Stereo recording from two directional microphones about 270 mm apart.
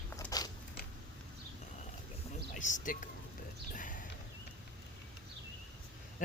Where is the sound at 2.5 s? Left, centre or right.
Left.